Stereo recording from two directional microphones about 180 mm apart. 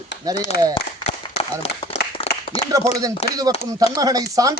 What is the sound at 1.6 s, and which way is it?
Speech, 35° left (ahead or behind).